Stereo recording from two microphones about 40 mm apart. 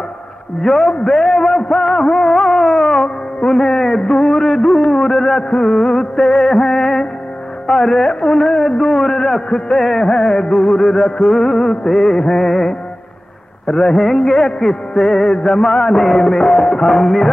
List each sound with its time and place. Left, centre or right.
0.6 s a man's voice: centre
1.0 s a sound: centre
1.6 s music: centre
2.9 s music: centre
7.6 s a man's voice: centre
8.1 s a sound: centre
13.7 s a man's voice: centre
15.4 s a sound: centre
16.7 s a man's voice: centre